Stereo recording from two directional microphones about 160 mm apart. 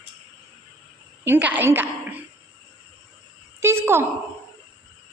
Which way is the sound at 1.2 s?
10° right (ahead or behind).